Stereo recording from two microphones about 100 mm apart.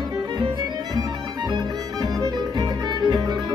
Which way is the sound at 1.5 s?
40° right (ahead or behind).